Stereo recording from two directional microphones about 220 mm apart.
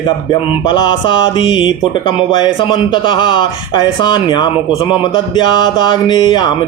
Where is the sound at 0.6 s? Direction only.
20° left (ahead or behind).